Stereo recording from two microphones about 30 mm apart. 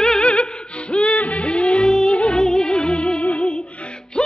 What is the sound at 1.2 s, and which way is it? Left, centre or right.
Music, left.